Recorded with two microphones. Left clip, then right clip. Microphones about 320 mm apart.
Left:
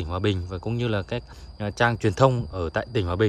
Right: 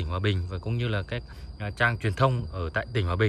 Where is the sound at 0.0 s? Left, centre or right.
Centre.